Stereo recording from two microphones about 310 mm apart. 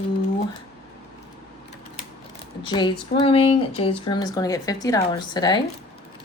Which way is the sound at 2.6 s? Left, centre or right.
Centre.